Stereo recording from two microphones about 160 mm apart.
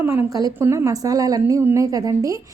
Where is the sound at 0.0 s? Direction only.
15° right (ahead or behind).